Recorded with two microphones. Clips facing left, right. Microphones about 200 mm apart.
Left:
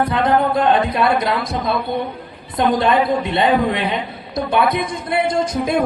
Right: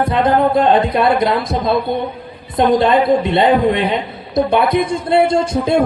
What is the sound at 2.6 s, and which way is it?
A woman's voice, 20° right (ahead or behind).